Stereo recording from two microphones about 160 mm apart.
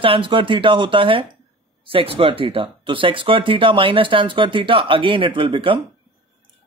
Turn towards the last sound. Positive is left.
turn(degrees=-30)  # may be behind; listen again after turning